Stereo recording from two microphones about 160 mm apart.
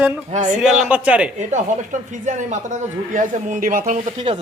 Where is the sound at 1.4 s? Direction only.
50° right (ahead or behind).